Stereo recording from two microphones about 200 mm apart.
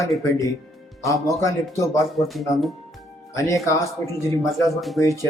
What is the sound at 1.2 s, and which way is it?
Speech, 15° left (ahead or behind).